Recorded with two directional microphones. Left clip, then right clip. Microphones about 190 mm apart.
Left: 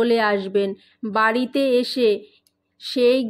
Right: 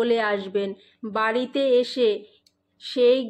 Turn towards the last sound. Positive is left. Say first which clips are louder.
# left 1 dB
turn(degrees=35)  # may be behind; listen again after turning